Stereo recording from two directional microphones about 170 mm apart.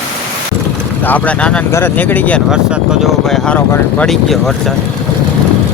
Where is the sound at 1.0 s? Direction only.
10° left (ahead or behind).